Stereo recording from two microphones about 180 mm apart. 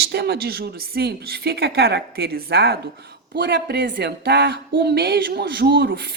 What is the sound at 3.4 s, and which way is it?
Speech, 70° right (ahead or behind).